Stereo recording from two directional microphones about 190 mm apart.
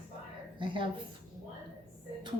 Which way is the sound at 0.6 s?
25° right (ahead or behind).